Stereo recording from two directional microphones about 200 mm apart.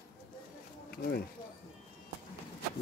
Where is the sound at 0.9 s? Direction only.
50° left (ahead or behind).